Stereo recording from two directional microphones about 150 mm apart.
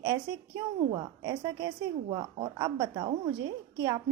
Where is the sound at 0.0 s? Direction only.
25° right (ahead or behind).